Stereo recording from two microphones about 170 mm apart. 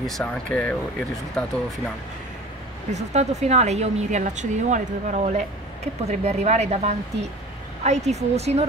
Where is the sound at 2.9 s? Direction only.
40° right (ahead or behind).